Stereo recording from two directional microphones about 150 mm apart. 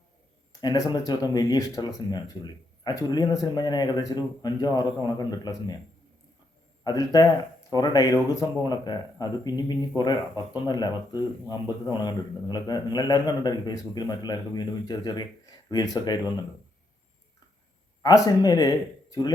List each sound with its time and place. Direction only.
0.6 s a man's voice: 25° left (ahead or behind)
6.8 s a man's voice: 25° left (ahead or behind)
18.0 s a man's voice: 25° left (ahead or behind)